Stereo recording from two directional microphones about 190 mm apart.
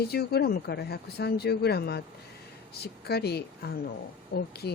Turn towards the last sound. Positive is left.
turn(degrees=60)  # may be behind; listen again after turning